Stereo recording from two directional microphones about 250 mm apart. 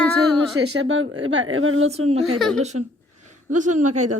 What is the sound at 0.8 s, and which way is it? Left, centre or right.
Speech, right.